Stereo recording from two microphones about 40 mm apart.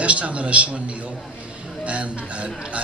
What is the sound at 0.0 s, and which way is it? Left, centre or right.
A man's voice, right.